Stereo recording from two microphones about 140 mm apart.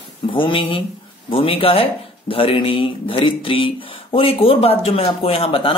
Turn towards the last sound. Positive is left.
turn(degrees=40)  # may be behind; listen again after turning